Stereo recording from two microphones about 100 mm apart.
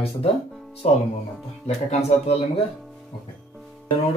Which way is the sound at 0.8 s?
90° left.